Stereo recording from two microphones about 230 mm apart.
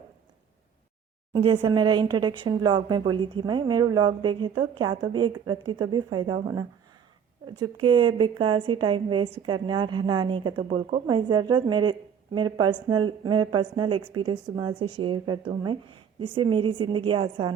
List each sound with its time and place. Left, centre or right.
1.3 s a woman's voice: right